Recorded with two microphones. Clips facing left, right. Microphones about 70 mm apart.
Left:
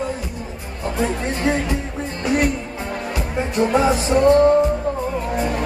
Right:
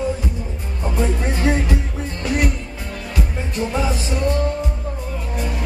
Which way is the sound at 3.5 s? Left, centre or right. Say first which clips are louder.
Left 6 dB; left.